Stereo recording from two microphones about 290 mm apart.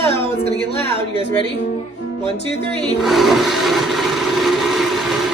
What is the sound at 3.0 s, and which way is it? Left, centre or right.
Toilet flush, centre.